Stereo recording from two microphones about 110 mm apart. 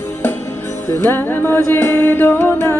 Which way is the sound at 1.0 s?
20° left (ahead or behind).